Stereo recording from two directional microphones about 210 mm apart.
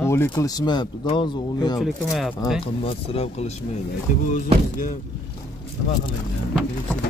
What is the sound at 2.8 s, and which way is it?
Speech, 25° left (ahead or behind).